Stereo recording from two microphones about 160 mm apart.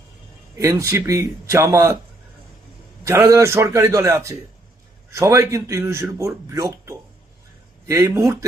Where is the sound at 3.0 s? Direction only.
20° right (ahead or behind).